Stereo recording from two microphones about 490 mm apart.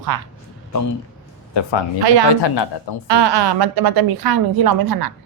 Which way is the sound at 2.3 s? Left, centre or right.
Left.